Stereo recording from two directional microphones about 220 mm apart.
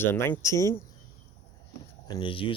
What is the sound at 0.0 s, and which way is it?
Speech, 10° left (ahead or behind).